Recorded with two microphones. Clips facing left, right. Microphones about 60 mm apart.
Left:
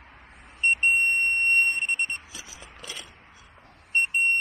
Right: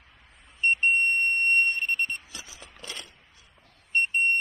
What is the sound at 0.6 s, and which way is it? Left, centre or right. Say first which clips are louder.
Vehicle: left 1 dB; left.